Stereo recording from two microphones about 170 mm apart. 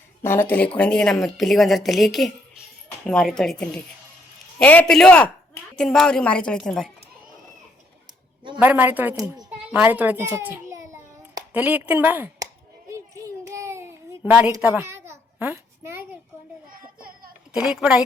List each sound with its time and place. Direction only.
0.2 s a man's voice: 15° left (ahead or behind)
8.5 s a woman's voice: 10° right (ahead or behind)
9.5 s a sound: 5° right (ahead or behind)
14.2 s a woman's voice: 5° right (ahead or behind)
14.6 s a sound: 15° right (ahead or behind)
17.5 s speech: 5° right (ahead or behind)